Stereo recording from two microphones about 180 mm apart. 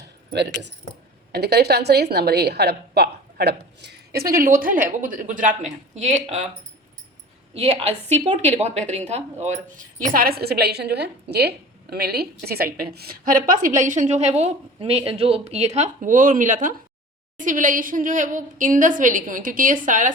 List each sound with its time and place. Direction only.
0.3 s a woman's voice: 75° right (ahead or behind); by 6.4 s 40° right (ahead or behind)
7.5 s a woman's voice: 35° right (ahead or behind)